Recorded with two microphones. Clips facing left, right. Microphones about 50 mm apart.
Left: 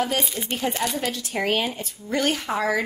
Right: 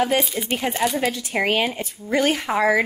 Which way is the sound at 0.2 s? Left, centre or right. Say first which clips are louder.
Right 3 dB; centre.